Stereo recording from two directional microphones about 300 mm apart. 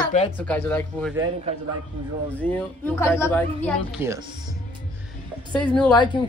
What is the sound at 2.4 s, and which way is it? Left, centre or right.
A woman's voice, centre.